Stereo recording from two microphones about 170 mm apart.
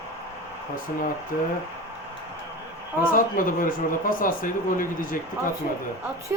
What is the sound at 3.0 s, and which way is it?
Speech, 55° left (ahead or behind).